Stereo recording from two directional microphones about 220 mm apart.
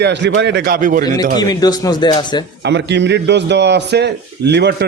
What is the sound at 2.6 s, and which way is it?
A man's voice, 55° right (ahead or behind).